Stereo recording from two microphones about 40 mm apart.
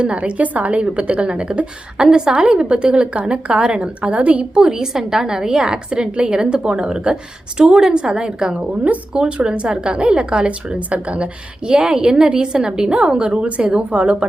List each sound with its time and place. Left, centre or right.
0.0 s a woman's voice: right
4.5 s a woman's voice: centre